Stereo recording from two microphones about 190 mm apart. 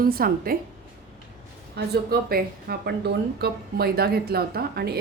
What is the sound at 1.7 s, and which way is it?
A woman's voice, 55° right (ahead or behind).